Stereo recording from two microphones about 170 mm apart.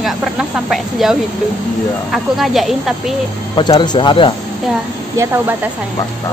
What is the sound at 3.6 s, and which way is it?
Speech, 25° left (ahead or behind).